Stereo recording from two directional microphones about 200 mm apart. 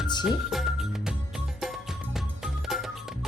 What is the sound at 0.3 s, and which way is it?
Music, centre (ahead or behind).